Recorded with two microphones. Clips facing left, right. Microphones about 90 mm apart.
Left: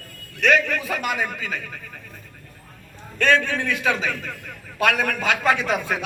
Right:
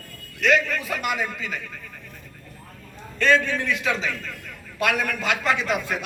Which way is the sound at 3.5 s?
65° left (ahead or behind).